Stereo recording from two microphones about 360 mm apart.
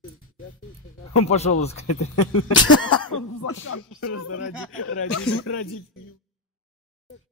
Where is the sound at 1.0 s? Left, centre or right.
Left.